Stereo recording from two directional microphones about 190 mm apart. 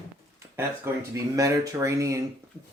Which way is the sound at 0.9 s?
15° right (ahead or behind).